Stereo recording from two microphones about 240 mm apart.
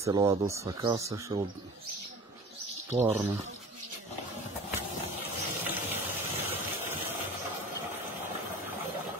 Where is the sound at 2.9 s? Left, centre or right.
Centre.